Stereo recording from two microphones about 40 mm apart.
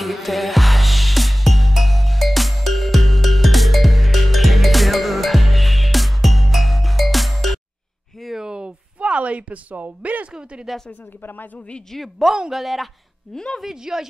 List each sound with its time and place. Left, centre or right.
0.0 s music: centre
8.4 s a sound: right
10.3 s a woman's voice: centre
12.4 s speech: centre
13.3 s speech: centre
13.6 s a woman's voice: centre